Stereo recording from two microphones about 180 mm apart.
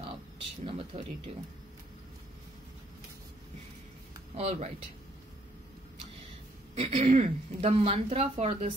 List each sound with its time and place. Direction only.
0.7 s a woman's voice: 35° right (ahead or behind)
4.4 s a woman's voice: 35° right (ahead or behind)
6.7 s a woman's voice: 35° right (ahead or behind)